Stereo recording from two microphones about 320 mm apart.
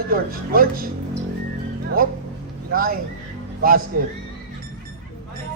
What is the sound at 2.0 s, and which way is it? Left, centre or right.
A man's voice, right.